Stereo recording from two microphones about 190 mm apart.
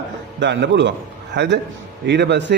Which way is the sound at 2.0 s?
65° right (ahead or behind).